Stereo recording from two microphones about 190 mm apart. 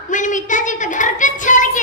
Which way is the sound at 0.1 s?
40° left (ahead or behind).